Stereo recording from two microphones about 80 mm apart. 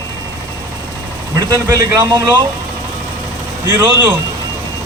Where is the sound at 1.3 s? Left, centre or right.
Right.